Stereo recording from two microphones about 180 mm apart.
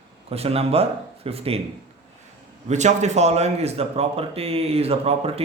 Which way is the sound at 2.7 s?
40° right (ahead or behind).